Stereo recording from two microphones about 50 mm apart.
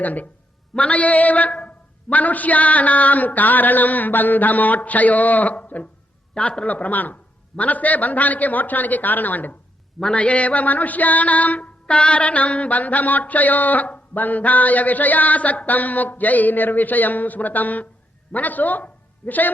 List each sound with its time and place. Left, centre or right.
0.0 s a man's voice: left
6.7 s a man's voice: left